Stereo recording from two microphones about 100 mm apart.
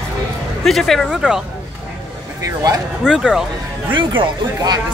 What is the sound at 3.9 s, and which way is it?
Speech, 55° right (ahead or behind).